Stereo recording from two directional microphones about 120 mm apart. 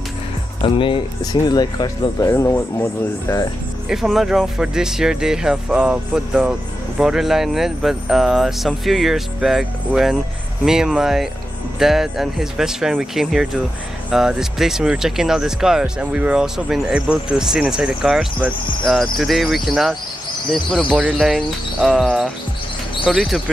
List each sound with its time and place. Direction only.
0.6 s speech: 45° left (ahead or behind); by 3.4 s 25° left (ahead or behind)
3.9 s speech: centre (ahead or behind)
21.0 s speech: 5° right (ahead or behind)